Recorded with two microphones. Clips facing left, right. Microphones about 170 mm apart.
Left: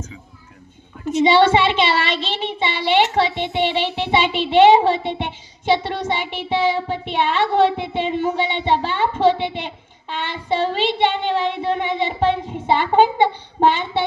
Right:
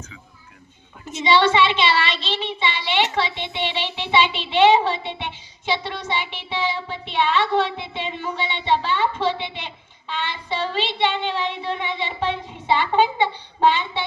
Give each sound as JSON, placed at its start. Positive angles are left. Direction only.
{"t": 1.0, "sound": "child singing", "side_deg": 40}